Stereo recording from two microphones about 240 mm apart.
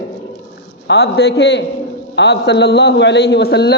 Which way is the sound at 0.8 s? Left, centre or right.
Left.